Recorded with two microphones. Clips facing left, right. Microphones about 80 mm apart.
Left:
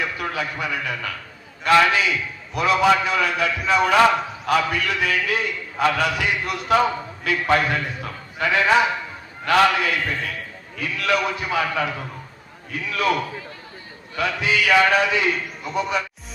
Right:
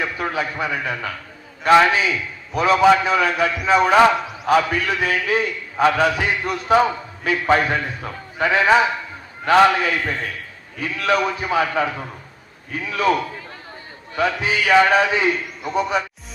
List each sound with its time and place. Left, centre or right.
0.0 s a man's voice: right
14.2 s a man's voice: right